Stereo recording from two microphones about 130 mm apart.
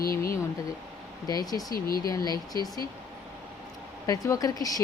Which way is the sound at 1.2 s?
30° left (ahead or behind).